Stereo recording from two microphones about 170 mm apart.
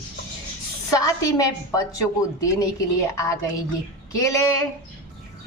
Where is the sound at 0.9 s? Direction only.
20° left (ahead or behind).